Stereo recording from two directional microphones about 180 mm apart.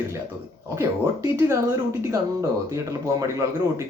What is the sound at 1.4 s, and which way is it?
A man's voice, 15° right (ahead or behind).